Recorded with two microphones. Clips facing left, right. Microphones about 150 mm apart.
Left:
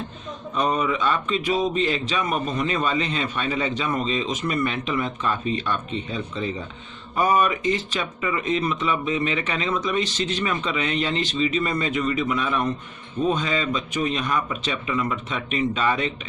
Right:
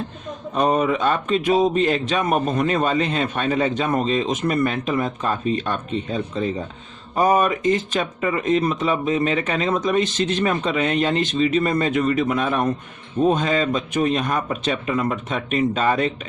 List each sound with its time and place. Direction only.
0.5 s a man's voice: 50° right (ahead or behind)